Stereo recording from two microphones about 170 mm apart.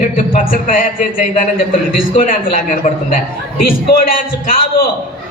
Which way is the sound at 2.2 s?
55° left (ahead or behind).